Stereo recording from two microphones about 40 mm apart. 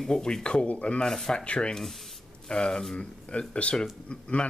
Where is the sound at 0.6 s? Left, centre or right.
Left.